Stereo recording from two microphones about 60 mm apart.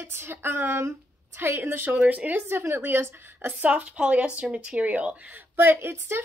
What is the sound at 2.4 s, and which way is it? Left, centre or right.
A woman's voice, right.